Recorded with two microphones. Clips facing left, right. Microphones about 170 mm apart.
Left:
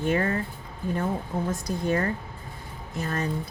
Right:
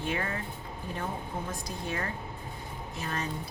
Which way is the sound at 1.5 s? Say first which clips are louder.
Left 9 dB; 45° left (ahead or behind).